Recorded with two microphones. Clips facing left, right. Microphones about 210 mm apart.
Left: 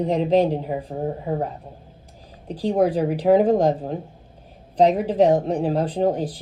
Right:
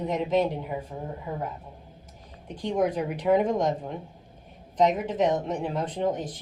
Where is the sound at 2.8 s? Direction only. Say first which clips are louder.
Left 6 dB; 35° left (ahead or behind).